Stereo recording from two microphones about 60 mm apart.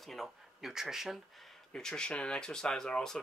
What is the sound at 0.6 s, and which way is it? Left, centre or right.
Speech, centre.